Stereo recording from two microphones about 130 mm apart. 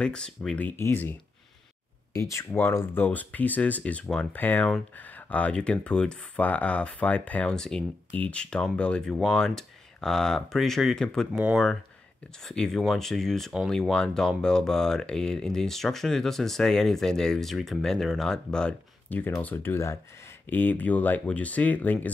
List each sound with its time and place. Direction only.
0.0 s speech: 5° left (ahead or behind)
2.1 s speech: 20° left (ahead or behind)